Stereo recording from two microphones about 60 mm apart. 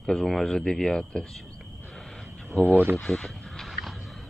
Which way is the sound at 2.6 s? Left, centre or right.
Right.